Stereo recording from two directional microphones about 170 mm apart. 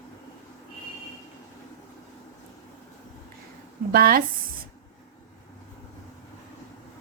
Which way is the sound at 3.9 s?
60° right (ahead or behind).